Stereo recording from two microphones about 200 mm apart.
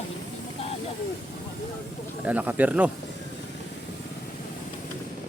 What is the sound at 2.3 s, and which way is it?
Speech, 5° right (ahead or behind).